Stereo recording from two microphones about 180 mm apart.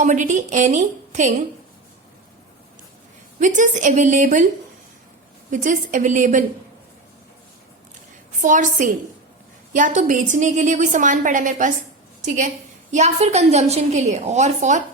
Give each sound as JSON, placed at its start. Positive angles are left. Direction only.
{"t": 0.0, "sound": "a woman's voice", "side_deg": -45}
{"t": 3.4, "sound": "a woman's voice", "side_deg": -45}
{"t": 5.5, "sound": "a woman's voice", "side_deg": -45}
{"t": 8.4, "sound": "a woman's voice", "side_deg": -45}
{"t": 12.9, "sound": "a woman's voice", "side_deg": -40}